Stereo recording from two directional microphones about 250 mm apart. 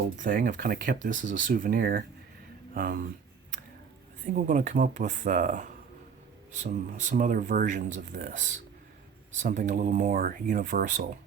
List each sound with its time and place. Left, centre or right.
0.2 s speech: right
4.3 s speech: right